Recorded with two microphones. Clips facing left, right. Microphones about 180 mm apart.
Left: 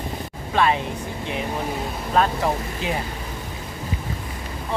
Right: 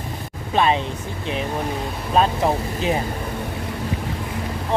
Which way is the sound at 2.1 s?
20° right (ahead or behind).